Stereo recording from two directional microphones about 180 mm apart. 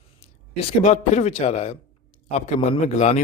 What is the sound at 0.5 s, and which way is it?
Speech, 40° left (ahead or behind).